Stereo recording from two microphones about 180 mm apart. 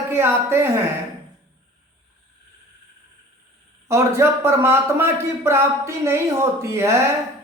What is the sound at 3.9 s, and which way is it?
A man's voice, 15° right (ahead or behind).